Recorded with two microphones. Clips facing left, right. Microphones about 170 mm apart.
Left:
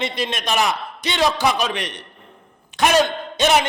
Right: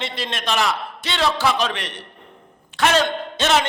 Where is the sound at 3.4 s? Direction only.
15° left (ahead or behind).